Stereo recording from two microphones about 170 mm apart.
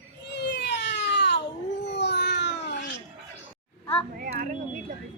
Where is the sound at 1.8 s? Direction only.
85° left.